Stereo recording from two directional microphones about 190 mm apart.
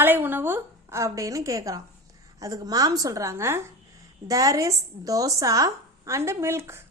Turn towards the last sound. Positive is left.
turn(degrees=-15)  # may be behind; listen again after turning